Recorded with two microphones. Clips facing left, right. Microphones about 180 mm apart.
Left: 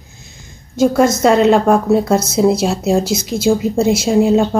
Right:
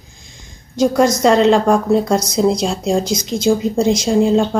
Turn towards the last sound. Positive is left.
turn(degrees=5)  # may be behind; listen again after turning